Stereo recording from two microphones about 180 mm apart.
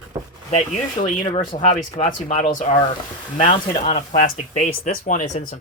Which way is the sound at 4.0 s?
40° left (ahead or behind).